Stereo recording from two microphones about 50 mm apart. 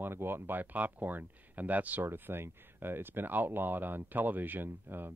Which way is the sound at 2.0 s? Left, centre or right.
Right.